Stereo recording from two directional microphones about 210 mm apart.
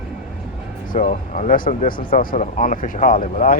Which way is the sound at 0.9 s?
40° left (ahead or behind).